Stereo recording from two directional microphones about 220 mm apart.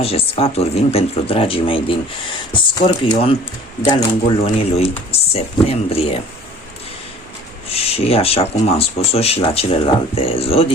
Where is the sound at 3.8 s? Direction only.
20° left (ahead or behind).